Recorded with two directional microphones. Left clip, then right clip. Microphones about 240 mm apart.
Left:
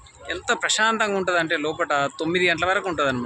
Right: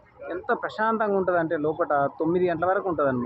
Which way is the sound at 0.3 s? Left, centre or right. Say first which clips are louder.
Left 4 dB; centre.